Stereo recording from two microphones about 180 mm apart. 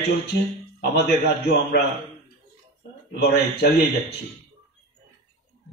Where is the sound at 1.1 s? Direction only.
65° left (ahead or behind).